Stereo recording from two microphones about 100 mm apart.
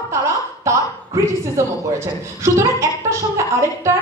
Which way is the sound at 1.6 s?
30° right (ahead or behind).